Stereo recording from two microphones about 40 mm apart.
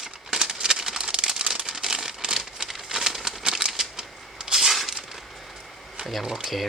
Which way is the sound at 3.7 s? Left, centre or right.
Centre.